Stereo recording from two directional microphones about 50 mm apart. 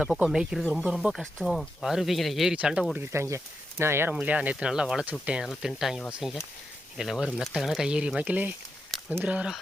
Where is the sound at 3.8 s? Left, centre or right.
Right.